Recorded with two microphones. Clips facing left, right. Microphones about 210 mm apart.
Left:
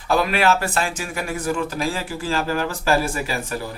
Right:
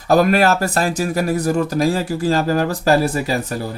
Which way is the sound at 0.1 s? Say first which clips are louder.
Right 5 dB; 45° right (ahead or behind).